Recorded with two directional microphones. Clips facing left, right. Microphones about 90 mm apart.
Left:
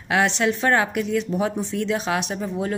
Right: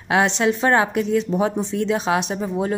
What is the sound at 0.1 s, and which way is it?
Speech, 25° right (ahead or behind).